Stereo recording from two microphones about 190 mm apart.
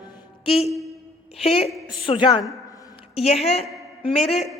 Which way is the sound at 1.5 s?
30° left (ahead or behind).